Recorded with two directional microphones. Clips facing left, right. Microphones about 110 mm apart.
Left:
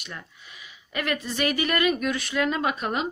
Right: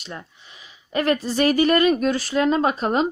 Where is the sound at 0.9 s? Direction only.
35° right (ahead or behind).